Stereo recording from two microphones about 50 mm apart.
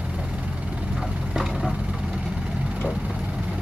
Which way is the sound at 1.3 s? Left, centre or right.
Centre.